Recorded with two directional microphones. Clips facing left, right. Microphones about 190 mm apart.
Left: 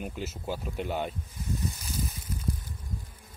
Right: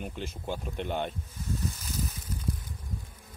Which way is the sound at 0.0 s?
5° left (ahead or behind).